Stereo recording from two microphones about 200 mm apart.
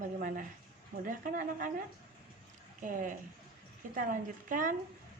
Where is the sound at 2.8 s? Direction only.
40° right (ahead or behind).